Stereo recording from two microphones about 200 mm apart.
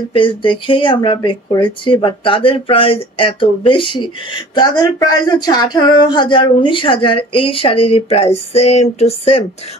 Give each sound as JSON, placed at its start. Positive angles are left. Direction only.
{"t": 0.1, "sound": "speech", "side_deg": 25}